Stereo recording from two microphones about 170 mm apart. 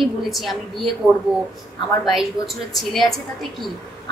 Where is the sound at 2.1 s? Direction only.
Centre (ahead or behind).